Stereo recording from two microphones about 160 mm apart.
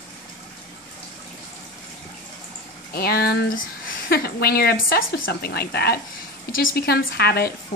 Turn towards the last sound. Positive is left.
turn(degrees=90)